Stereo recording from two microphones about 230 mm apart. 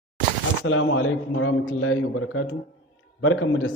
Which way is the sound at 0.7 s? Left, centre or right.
Left.